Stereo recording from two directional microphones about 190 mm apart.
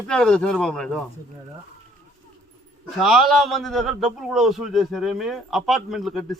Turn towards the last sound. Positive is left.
turn(degrees=0)  # may be behind; listen again after turning